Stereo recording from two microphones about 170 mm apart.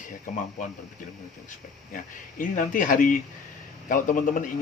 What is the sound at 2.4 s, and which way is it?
Speech, 50° left (ahead or behind).